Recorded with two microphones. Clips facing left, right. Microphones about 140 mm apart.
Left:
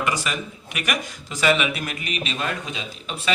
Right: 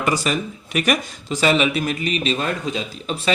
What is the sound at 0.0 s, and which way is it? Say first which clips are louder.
Speech: right 5 dB; 35° right (ahead or behind).